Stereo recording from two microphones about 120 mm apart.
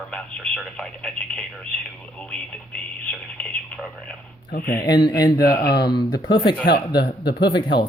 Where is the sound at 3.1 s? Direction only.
5° left (ahead or behind).